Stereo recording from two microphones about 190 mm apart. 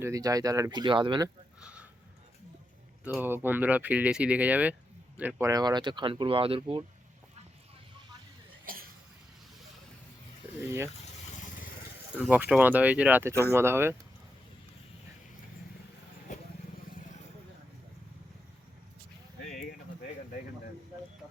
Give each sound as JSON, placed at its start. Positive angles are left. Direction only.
{"t": 0.0, "sound": "speech", "side_deg": -20}
{"t": 1.6, "sound": "a sound", "side_deg": -5}
{"t": 3.0, "sound": "speech", "side_deg": -5}
{"t": 8.6, "sound": "cough", "side_deg": -50}
{"t": 12.3, "sound": "speech", "side_deg": -10}